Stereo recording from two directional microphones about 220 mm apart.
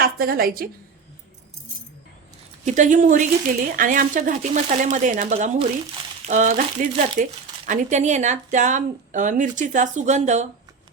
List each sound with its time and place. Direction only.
0.0 s a woman's voice: 45° right (ahead or behind)
2.6 s a woman's voice: 35° right (ahead or behind)